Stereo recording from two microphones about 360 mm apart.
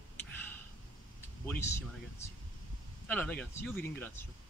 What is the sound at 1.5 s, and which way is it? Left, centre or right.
Speech, centre.